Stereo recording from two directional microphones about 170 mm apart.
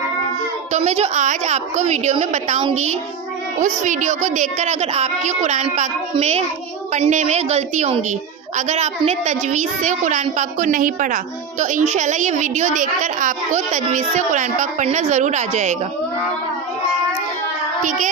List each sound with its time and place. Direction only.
0.7 s a woman's voice: 40° right (ahead or behind)